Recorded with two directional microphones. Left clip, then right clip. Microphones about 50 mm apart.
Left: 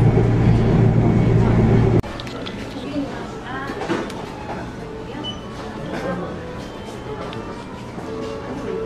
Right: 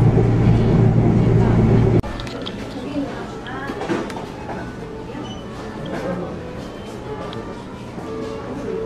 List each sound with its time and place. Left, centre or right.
0.1 s vehicle: right